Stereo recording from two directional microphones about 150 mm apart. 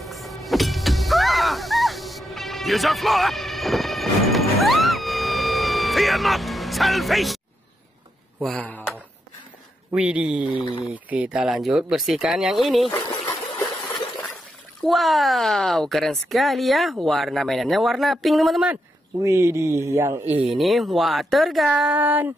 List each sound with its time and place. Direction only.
0.0 s a sound: centre (ahead or behind)
8.4 s speech: 5° left (ahead or behind)
9.8 s speech: 10° right (ahead or behind)
14.8 s speech: centre (ahead or behind)
19.2 s speech: 20° right (ahead or behind)
20.5 s speech: centre (ahead or behind)